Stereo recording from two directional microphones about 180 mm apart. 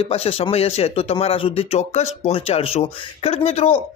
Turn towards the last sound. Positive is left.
turn(degrees=35)  # may be behind; listen again after turning